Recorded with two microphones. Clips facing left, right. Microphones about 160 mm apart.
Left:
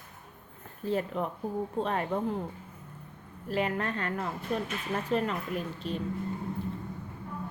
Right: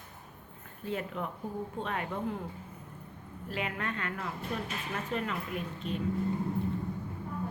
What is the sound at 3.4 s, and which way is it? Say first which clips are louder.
A woman's voice: left 6 dB; 40° left (ahead or behind).